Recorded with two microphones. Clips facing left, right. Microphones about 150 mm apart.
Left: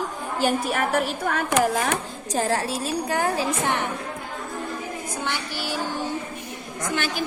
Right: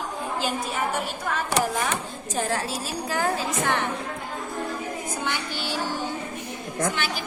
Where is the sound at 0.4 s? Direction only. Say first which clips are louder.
Left 7 dB; 60° left (ahead or behind).